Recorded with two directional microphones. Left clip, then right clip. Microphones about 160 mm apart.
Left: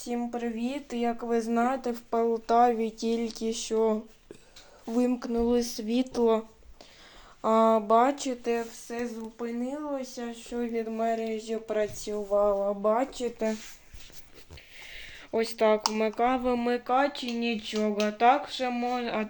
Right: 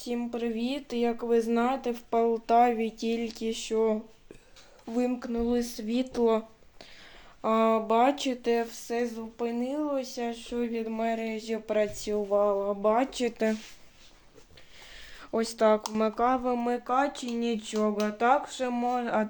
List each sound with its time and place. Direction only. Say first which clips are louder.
0.0 s speech: even; 10° right (ahead or behind)
2.0 s speech: right 1 dB; 20° right (ahead or behind); by 6.4 s centre (ahead or behind)
7.4 s speech: left 2 dB; 5° right (ahead or behind)
8.0 s speech: right 1 dB; 25° right (ahead or behind)
12.9 s speech: right 1 dB; 35° right (ahead or behind)
14.8 s speech: left 3 dB; 15° right (ahead or behind)